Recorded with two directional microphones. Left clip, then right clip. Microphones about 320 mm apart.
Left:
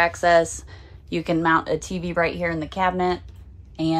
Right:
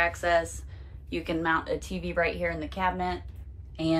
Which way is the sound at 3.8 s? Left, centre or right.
Centre.